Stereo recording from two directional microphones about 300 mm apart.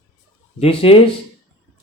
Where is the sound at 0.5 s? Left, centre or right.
Centre.